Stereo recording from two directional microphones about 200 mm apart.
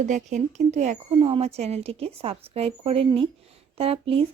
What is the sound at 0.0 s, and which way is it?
Speech, 35° right (ahead or behind).